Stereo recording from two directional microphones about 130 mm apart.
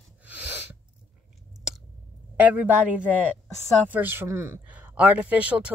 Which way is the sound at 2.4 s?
10° right (ahead or behind).